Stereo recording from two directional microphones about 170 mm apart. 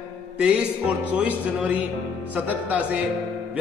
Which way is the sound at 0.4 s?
5° right (ahead or behind).